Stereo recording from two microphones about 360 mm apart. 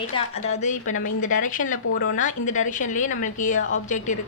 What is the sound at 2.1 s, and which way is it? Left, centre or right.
A woman's voice, left.